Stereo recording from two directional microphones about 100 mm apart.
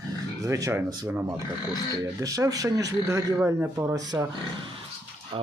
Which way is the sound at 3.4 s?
20° right (ahead or behind).